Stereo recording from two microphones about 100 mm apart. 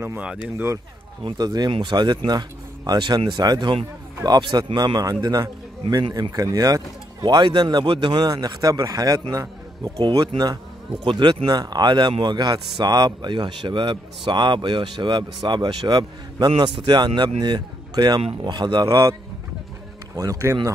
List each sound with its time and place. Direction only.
0.2 s speech: 10° right (ahead or behind)
1.4 s a man's voice: 40° right (ahead or behind)
6.0 s speech: 55° right (ahead or behind)
6.3 s a man's voice: 35° right (ahead or behind)
11.1 s a man's voice: 55° right (ahead or behind); by 19.1 s 40° right (ahead or behind)
20.2 s speech: 35° right (ahead or behind)